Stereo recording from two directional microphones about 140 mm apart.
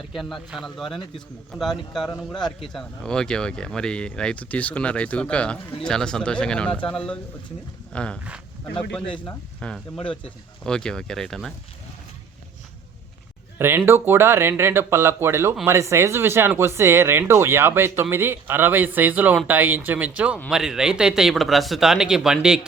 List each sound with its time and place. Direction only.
0.1 s speech: centre (ahead or behind)
9.2 s speech: 5° left (ahead or behind)
13.6 s speech: 15° right (ahead or behind)